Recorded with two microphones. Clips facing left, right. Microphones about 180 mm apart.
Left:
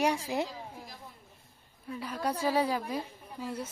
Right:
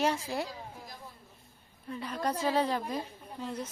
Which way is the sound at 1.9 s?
5° left (ahead or behind).